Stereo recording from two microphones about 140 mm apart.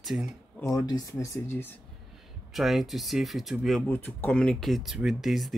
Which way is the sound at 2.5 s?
Centre (ahead or behind).